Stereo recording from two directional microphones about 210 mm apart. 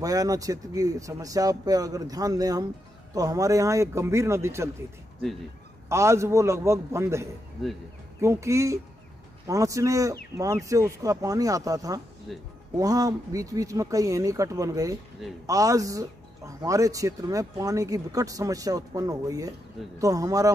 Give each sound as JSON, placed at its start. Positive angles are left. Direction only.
{"t": 0.0, "sound": "speech", "side_deg": -15}
{"t": 5.9, "sound": "speech", "side_deg": -15}
{"t": 7.6, "sound": "speech", "side_deg": 0}
{"t": 8.2, "sound": "speech", "side_deg": -15}
{"t": 12.3, "sound": "speech", "side_deg": 0}
{"t": 12.7, "sound": "speech", "side_deg": -15}